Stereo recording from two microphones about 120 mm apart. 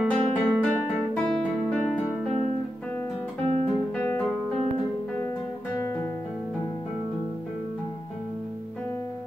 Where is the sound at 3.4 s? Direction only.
55° right (ahead or behind).